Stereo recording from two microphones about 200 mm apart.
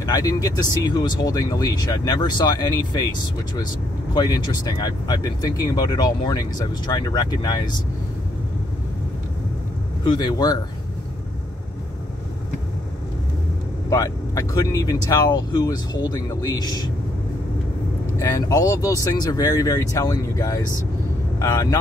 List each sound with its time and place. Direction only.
0.0 s speech: 20° left (ahead or behind)
4.1 s speech: 20° left (ahead or behind)
10.0 s speech: 20° left (ahead or behind)
13.8 s speech: 15° left (ahead or behind)
18.2 s speech: 15° left (ahead or behind)